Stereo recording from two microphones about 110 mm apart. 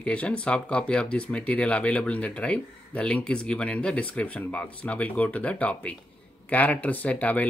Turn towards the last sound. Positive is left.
turn(degrees=15)  # may be behind; listen again after turning